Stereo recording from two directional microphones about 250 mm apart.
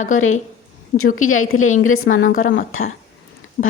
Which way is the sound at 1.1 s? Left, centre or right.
Left.